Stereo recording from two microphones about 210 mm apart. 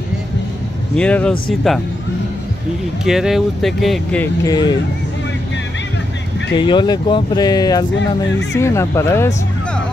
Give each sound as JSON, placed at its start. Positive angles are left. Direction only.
{"t": 0.9, "sound": "speech", "side_deg": 5}
{"t": 3.1, "sound": "speech", "side_deg": 0}
{"t": 4.5, "sound": "speech", "side_deg": 20}
{"t": 6.5, "sound": "speech", "side_deg": 20}
{"t": 7.9, "sound": "speech", "side_deg": 60}
{"t": 8.5, "sound": "speech", "side_deg": 15}